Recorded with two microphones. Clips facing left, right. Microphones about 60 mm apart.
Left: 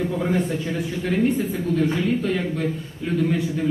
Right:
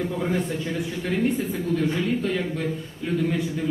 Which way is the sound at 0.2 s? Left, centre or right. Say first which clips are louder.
Left 3 dB; centre.